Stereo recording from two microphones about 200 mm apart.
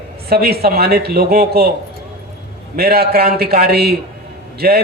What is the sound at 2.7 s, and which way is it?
A man's voice, 50° right (ahead or behind).